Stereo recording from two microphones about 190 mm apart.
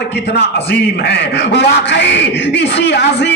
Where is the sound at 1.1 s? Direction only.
65° left (ahead or behind).